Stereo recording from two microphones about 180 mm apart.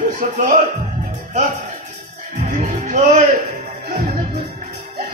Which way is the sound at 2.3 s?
45° right (ahead or behind).